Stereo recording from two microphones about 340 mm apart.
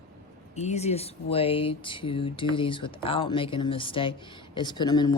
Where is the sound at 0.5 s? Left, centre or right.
Centre.